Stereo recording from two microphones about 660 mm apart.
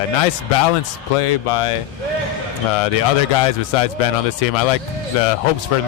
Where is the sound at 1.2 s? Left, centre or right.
Left.